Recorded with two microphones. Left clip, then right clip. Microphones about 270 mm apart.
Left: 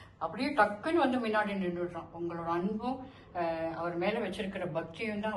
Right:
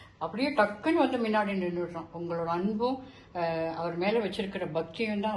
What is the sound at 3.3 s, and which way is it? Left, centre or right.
Speech, centre.